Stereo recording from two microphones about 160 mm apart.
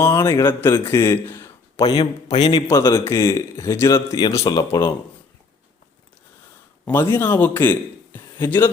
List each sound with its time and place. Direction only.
0.0 s a man's voice: 15° left (ahead or behind)
1.8 s speech: 25° left (ahead or behind)
2.6 s speech: 20° left (ahead or behind)
7.1 s a man's voice: 15° left (ahead or behind)